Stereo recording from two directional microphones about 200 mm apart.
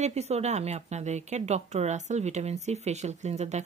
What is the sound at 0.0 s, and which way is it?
Speech, 35° right (ahead or behind).